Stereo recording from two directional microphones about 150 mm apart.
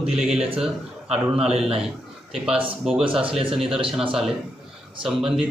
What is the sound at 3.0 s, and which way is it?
Speech, 35° right (ahead or behind).